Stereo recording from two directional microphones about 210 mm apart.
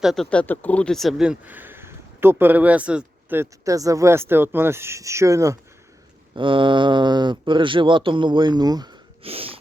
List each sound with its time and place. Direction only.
0.0 s speech: centre (ahead or behind); by 9.6 s 25° right (ahead or behind)